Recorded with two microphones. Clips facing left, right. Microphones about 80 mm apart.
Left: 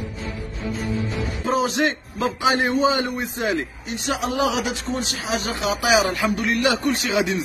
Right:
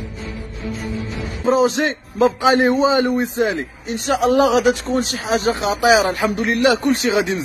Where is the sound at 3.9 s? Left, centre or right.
Right.